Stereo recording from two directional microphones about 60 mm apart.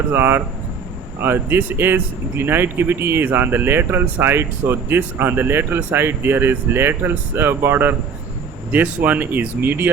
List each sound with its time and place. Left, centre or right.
0.1 s speech: right